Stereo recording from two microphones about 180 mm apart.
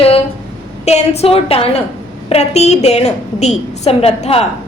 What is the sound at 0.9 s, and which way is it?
A woman's voice, 35° left (ahead or behind).